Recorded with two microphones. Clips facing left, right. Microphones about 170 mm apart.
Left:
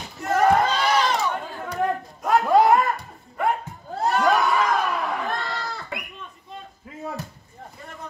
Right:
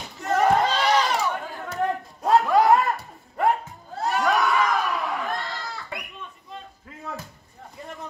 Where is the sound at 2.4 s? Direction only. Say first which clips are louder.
Left 2 dB; 20° left (ahead or behind).